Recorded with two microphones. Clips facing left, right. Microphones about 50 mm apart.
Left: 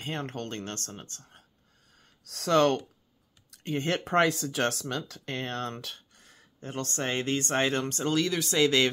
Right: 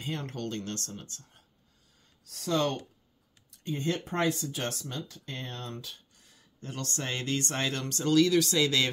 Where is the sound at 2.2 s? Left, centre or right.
Left.